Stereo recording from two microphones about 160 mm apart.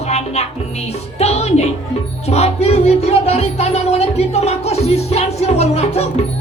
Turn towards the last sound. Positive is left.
turn(degrees=40)  # may be behind; listen again after turning